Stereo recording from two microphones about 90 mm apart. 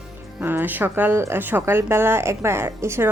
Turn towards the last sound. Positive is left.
turn(degrees=-30)  # may be behind; listen again after turning